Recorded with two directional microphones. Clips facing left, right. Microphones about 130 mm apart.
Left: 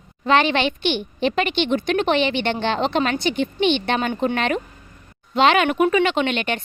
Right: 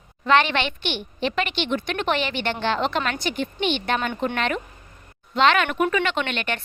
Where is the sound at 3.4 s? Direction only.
45° right (ahead or behind).